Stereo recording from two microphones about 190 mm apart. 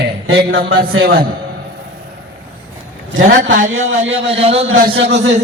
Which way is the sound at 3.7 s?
90° right.